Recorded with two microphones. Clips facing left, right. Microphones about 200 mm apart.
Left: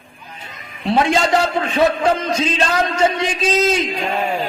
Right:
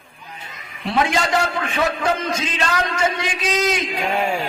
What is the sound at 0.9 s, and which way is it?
Speech, 25° left (ahead or behind).